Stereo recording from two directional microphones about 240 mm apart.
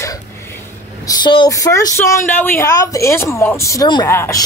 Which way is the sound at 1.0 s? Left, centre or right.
Centre.